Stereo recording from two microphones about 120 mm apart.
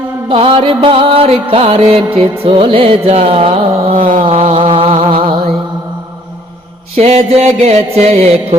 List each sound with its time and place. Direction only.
0.3 s music: 45° right (ahead or behind)
4.7 s a sound: 45° right (ahead or behind)
6.9 s music: 60° right (ahead or behind)